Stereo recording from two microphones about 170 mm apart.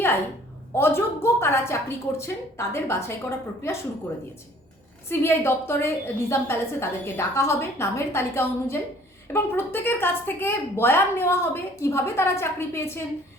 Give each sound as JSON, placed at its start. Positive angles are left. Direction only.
{"t": 0.8, "sound": "a woman's voice", "side_deg": 15}
{"t": 5.0, "sound": "a woman's voice", "side_deg": 15}